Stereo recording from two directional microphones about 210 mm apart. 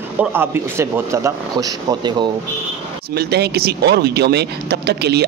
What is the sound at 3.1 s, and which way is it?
Speech, 50° right (ahead or behind).